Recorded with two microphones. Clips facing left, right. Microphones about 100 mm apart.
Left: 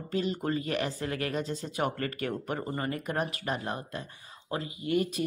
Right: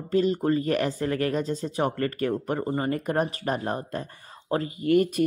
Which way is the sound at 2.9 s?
45° right (ahead or behind).